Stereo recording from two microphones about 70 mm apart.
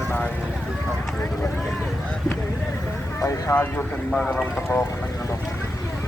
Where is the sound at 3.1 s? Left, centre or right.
Left.